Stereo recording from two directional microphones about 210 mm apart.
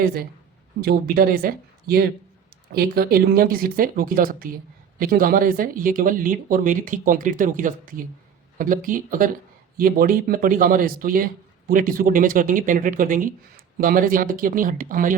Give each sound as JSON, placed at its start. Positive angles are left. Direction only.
{"t": 0.0, "sound": "speech", "side_deg": -45}